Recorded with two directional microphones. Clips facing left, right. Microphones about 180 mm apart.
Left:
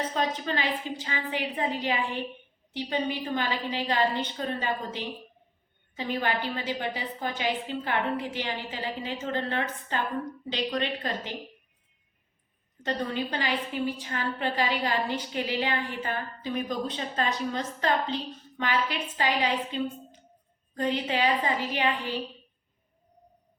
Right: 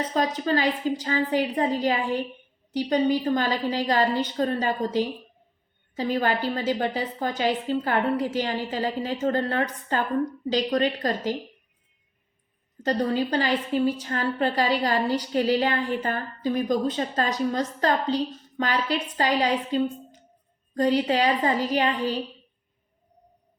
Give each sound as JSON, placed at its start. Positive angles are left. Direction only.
{"t": 0.1, "sound": "a woman's voice", "side_deg": -40}
{"t": 12.8, "sound": "a woman's voice", "side_deg": -35}